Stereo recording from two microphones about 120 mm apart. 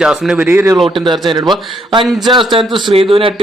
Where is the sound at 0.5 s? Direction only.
25° right (ahead or behind).